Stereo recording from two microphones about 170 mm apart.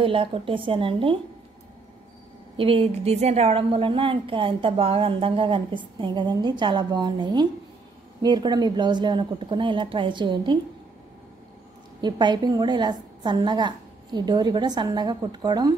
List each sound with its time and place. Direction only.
0.0 s a woman's voice: 30° right (ahead or behind)
2.5 s a woman's voice: 35° right (ahead or behind)
12.0 s a woman's voice: 25° right (ahead or behind)